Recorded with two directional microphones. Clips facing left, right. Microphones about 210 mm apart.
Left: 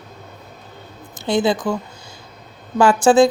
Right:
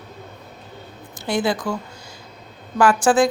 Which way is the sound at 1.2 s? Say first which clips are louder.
Left 4 dB; 20° left (ahead or behind).